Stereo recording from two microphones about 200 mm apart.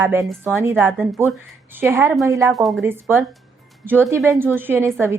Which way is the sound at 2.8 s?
10° right (ahead or behind).